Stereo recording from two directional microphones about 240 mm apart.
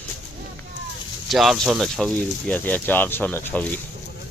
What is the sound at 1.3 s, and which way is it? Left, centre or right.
Speech, centre.